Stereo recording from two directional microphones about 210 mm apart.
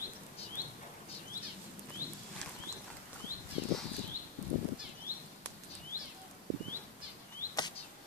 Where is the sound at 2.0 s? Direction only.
40° left (ahead or behind).